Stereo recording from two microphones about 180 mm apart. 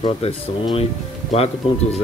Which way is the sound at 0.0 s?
30° left (ahead or behind).